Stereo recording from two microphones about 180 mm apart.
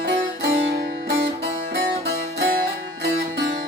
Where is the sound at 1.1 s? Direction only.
65° right (ahead or behind).